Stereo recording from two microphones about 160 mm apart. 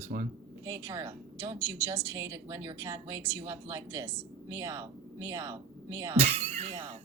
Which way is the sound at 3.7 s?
15° right (ahead or behind).